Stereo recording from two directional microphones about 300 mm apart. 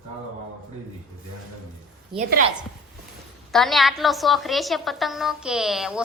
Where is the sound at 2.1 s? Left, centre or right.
Centre.